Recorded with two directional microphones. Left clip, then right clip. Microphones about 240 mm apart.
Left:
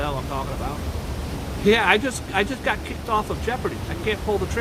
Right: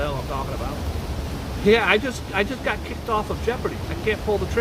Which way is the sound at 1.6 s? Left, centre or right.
Centre.